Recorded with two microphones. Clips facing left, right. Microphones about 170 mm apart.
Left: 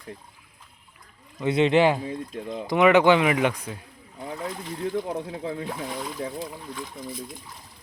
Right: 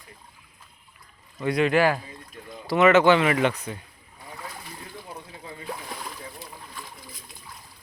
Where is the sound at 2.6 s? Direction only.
15° left (ahead or behind).